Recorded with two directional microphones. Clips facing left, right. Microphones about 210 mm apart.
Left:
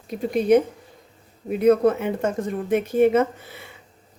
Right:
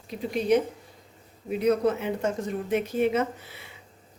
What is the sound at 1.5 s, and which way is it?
Speech, 55° left (ahead or behind).